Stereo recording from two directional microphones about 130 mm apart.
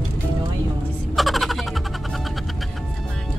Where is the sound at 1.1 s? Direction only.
Centre (ahead or behind).